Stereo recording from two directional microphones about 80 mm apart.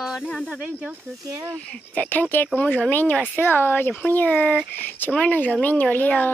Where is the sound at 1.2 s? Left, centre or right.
Right.